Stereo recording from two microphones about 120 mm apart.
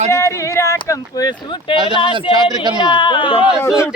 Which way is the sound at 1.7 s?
40° right (ahead or behind).